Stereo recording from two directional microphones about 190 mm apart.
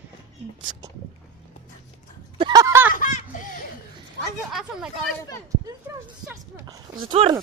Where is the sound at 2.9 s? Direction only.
45° left (ahead or behind).